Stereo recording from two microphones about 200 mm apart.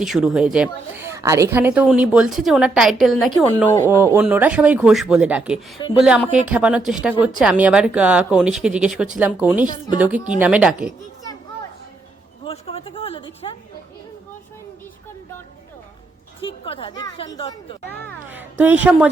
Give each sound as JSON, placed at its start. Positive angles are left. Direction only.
{"t": 0.0, "sound": "a woman's voice", "side_deg": 0}
{"t": 3.8, "sound": "a woman's voice", "side_deg": -15}
{"t": 12.5, "sound": "speech", "side_deg": 30}
{"t": 16.4, "sound": "speech", "side_deg": 25}
{"t": 18.3, "sound": "speech", "side_deg": -10}